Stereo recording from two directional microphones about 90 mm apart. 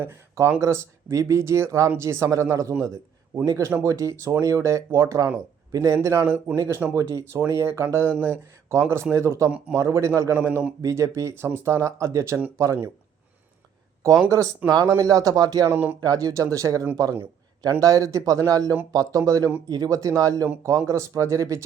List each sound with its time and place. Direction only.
0.0 s speech: 30° right (ahead or behind)
6.9 s speech: 35° right (ahead or behind)
14.3 s speech: 35° right (ahead or behind)
15.7 s speech: 20° right (ahead or behind)
16.0 s speech: 45° right (ahead or behind)